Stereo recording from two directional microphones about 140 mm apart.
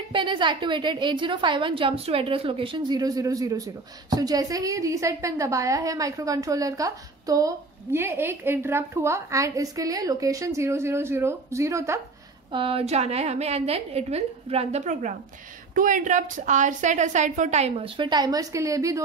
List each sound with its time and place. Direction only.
0.1 s a woman's voice: 35° right (ahead or behind); by 12.0 s 20° right (ahead or behind)
12.5 s a woman's voice: 40° right (ahead or behind); by 15.1 s 60° right (ahead or behind)
15.7 s a woman's voice: 70° right (ahead or behind); by 19.0 s 25° right (ahead or behind)